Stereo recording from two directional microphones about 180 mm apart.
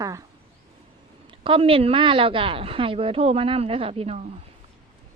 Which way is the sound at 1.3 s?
30° right (ahead or behind).